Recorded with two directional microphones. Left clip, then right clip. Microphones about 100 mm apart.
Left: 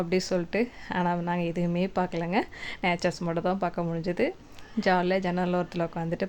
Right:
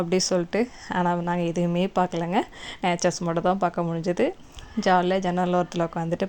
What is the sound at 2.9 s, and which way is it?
A woman's voice, 50° right (ahead or behind).